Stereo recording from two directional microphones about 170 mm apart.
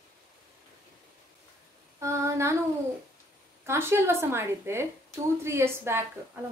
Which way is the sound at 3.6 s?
15° right (ahead or behind).